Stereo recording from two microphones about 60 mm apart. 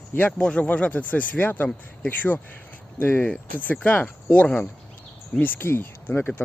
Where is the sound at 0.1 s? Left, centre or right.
Left.